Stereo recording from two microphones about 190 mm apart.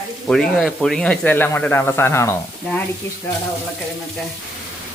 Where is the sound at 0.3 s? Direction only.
5° left (ahead or behind).